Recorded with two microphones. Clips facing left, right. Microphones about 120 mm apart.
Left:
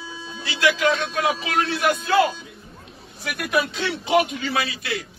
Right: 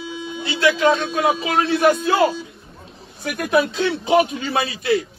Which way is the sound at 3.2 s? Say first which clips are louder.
Right 5 dB; 40° right (ahead or behind).